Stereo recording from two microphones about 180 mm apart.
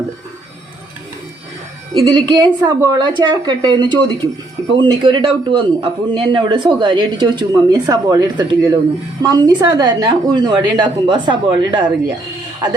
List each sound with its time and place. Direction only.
2.0 s a man's voice: 25° right (ahead or behind)